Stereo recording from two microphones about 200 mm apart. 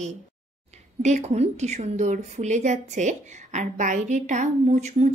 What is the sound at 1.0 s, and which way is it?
A woman's voice, 35° right (ahead or behind).